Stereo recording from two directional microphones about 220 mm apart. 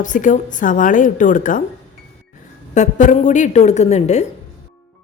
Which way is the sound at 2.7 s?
35° left (ahead or behind).